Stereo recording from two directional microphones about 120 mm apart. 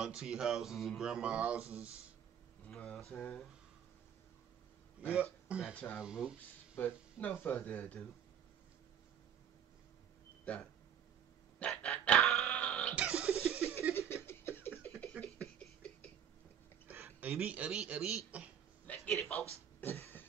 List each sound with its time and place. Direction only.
0.0 s speech: 5° right (ahead or behind)
2.6 s a sound: 10° left (ahead or behind)
5.0 s speech: 10° right (ahead or behind)
6.8 s speech: 15° left (ahead or behind)
10.5 s speech: 10° left (ahead or behind)
11.6 s dog: 10° left (ahead or behind)
12.9 s music: 5° right (ahead or behind)
13.9 s a sound: 20° left (ahead or behind)
16.9 s a sound: 20° right (ahead or behind)
17.3 s speech: 10° right (ahead or behind)
18.9 s a man's voice: 5° left (ahead or behind)
19.8 s music: 20° left (ahead or behind)